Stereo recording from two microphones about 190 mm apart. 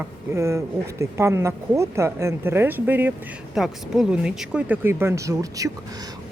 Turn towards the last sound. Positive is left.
turn(degrees=-15)  # may be behind; listen again after turning